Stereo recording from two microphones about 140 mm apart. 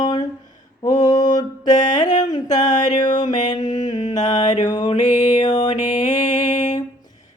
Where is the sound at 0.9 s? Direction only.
65° left (ahead or behind).